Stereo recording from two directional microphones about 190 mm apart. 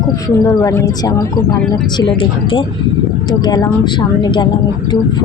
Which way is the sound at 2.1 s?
30° left (ahead or behind).